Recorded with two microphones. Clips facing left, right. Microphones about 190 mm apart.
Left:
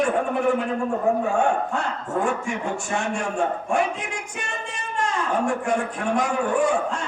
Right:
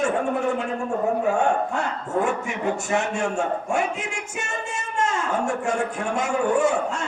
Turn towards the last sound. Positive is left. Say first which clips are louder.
# right 1 dB
turn(degrees=-25)  # may be behind; listen again after turning